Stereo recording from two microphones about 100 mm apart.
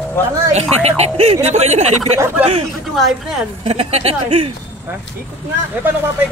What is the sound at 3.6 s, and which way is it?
Speech, 90° right.